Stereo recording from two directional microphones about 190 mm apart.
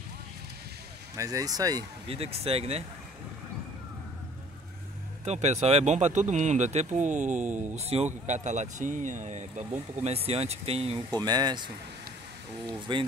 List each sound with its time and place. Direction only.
1.1 s speech: 15° right (ahead or behind)
2.0 s speech: 30° right (ahead or behind)
5.2 s speech: 35° right (ahead or behind)
11.2 s speech: 20° right (ahead or behind)
12.7 s speech: 25° right (ahead or behind)